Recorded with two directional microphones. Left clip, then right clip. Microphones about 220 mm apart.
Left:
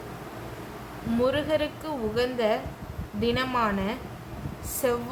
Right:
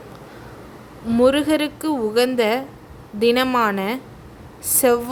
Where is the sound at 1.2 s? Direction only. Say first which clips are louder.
Right 8 dB; 45° right (ahead or behind).